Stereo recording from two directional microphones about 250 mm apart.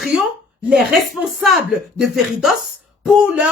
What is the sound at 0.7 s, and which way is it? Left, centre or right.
A woman's voice, centre.